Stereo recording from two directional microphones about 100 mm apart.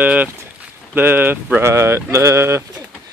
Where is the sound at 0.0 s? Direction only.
15° right (ahead or behind).